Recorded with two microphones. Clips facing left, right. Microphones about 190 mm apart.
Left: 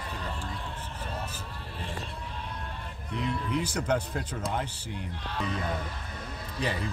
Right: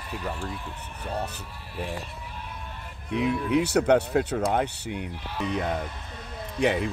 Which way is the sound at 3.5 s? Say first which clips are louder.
Right 9 dB; 65° right (ahead or behind).